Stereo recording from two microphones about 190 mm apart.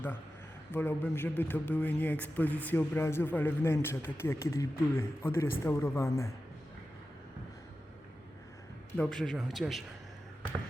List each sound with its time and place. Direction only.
0.7 s a man's voice: 10° left (ahead or behind)
9.0 s speech: centre (ahead or behind)